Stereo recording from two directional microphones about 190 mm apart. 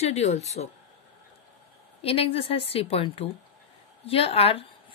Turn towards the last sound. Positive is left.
turn(degrees=30)  # may be behind; listen again after turning